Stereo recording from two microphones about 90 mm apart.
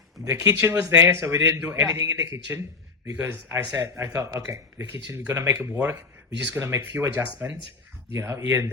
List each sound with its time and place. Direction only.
0.3 s a man's voice: 35° right (ahead or behind)
0.5 s a man's voice: 20° right (ahead or behind)
8.1 s a man's voice: 30° right (ahead or behind)